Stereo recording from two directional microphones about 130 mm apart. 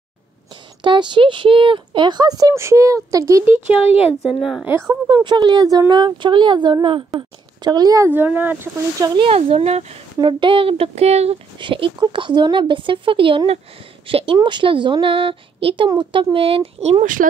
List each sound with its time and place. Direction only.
0.8 s speech: 35° right (ahead or behind)
3.8 s speech: 50° left (ahead or behind)
4.2 s a woman's voice: 5° right (ahead or behind)
4.6 s speech: 20° right (ahead or behind)
5.0 s a woman's voice: 35° right (ahead or behind)
8.1 s speech: 15° right (ahead or behind)
9.0 s speech: 35° right (ahead or behind)
9.3 s speech: 55° right (ahead or behind)
10.2 s a woman's voice: 40° right (ahead or behind)
11.5 s a woman's voice: 40° right (ahead or behind)
17.0 s speech: 90° right